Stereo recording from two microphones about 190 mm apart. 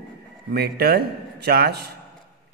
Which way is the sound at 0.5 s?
55° right (ahead or behind).